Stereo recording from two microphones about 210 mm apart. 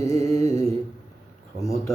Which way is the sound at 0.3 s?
15° left (ahead or behind).